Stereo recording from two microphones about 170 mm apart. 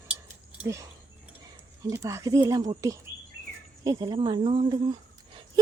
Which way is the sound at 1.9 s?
15° right (ahead or behind).